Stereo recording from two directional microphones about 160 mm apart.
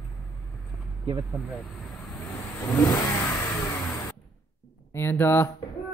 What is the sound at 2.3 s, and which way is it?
Vehicle, 15° left (ahead or behind).